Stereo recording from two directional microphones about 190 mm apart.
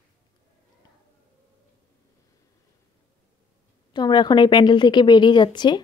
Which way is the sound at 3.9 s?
20° left (ahead or behind).